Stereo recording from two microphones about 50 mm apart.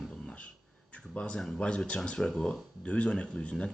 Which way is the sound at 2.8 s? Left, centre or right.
Left.